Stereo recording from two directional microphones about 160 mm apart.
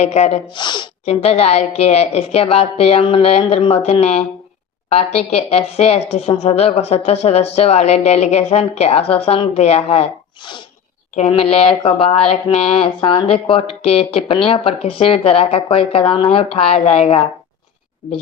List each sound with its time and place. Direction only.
0.0 s a woman's voice: 45° left (ahead or behind)
1.0 s a woman's voice: 40° left (ahead or behind)